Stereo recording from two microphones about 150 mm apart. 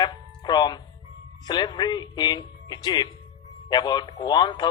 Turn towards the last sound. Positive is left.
turn(degrees=30)  # may be behind; listen again after turning